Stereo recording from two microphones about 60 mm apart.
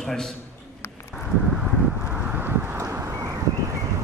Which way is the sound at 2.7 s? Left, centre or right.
Right.